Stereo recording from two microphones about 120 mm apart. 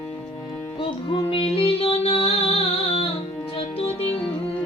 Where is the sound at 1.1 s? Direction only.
50° left (ahead or behind).